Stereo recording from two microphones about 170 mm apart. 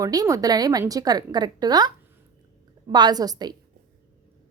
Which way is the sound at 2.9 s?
25° right (ahead or behind).